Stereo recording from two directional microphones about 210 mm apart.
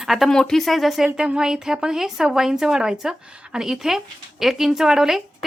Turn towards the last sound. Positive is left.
turn(degrees=0)  # may be behind; listen again after turning